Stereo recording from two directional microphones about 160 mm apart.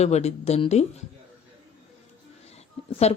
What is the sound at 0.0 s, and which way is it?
Speech, 40° left (ahead or behind).